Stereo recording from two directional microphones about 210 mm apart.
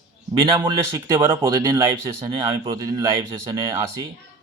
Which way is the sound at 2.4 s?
15° right (ahead or behind).